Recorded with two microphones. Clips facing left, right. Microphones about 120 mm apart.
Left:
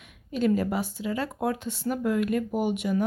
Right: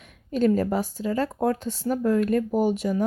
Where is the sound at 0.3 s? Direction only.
40° right (ahead or behind).